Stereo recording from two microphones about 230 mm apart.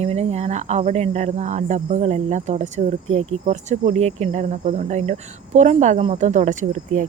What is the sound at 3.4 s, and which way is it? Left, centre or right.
Cricket, right.